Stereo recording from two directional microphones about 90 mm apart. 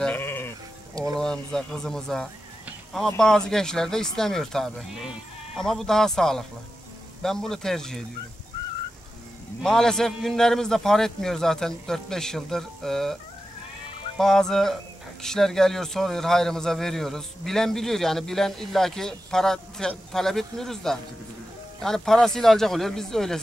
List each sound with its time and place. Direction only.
0.0 s music: 20° left (ahead or behind)
1.0 s speech: 5° left (ahead or behind)
9.6 s speech: 5° left (ahead or behind)